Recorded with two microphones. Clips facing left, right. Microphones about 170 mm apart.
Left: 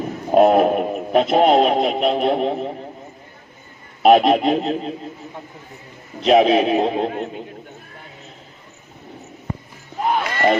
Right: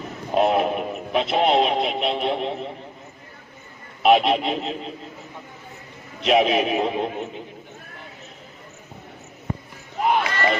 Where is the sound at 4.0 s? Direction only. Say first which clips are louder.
Left 5 dB; 45° left (ahead or behind).